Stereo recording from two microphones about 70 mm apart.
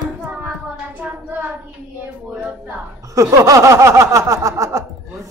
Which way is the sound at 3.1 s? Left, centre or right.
Right.